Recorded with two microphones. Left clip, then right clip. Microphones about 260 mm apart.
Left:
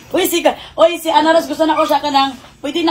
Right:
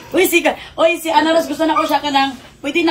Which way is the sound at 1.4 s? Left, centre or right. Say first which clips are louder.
Left 2 dB; centre.